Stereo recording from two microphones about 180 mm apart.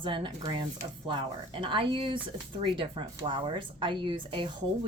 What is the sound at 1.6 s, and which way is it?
Speech, 25° right (ahead or behind).